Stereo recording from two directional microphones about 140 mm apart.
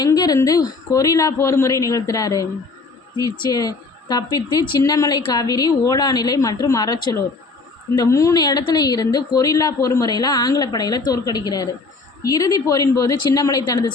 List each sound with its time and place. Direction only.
0.0 s speech: 25° left (ahead or behind)